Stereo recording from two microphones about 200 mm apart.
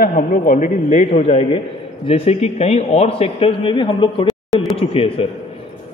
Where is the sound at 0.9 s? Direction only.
30° left (ahead or behind).